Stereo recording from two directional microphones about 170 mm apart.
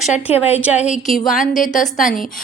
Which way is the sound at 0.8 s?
45° left (ahead or behind).